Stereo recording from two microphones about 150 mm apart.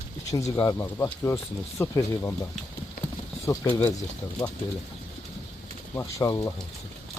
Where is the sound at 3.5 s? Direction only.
20° left (ahead or behind).